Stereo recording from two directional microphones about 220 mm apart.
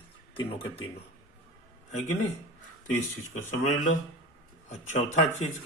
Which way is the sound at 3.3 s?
35° left (ahead or behind).